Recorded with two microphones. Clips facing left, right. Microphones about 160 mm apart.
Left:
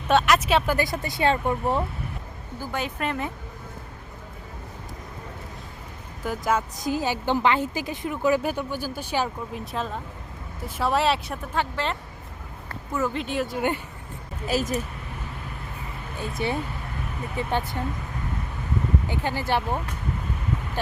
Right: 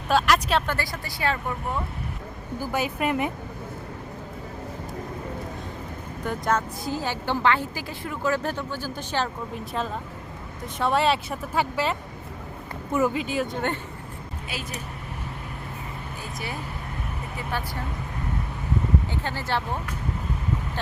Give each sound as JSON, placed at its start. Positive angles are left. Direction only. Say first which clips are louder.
{"t": 0.1, "sound": "speech", "louder": "left 2 dB", "side_deg": 0}
{"t": 0.8, "sound": "speech", "louder": "left 5 dB", "side_deg": 20}
{"t": 2.6, "sound": "speech", "louder": "right 3 dB", "side_deg": -10}
{"t": 6.2, "sound": "speech", "louder": "even", "side_deg": 5}
{"t": 6.6, "sound": "a woman's voice", "louder": "left 2 dB", "side_deg": 15}
{"t": 13.1, "sound": "speech", "louder": "right 1 dB", "side_deg": 0}
{"t": 14.4, "sound": "speech", "louder": "left 11 dB", "side_deg": 40}
{"t": 16.2, "sound": "speech", "louder": "left 9 dB", "side_deg": 25}
{"t": 19.0, "sound": "a woman's voice", "louder": "left 3 dB", "side_deg": 15}